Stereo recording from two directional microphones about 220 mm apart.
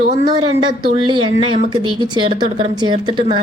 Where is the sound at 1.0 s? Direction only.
20° right (ahead or behind).